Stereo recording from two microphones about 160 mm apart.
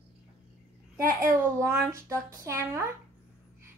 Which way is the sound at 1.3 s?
15° right (ahead or behind).